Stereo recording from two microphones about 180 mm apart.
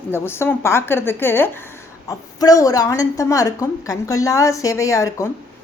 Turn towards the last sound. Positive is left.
turn(degrees=15)  # may be behind; listen again after turning